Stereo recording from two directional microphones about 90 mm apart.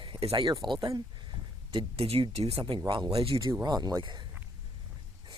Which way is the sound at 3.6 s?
50° right (ahead or behind).